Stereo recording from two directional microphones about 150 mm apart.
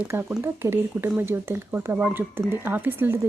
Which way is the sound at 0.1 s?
15° right (ahead or behind).